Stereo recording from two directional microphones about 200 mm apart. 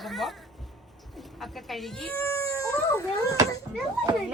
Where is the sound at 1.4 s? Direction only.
Centre (ahead or behind).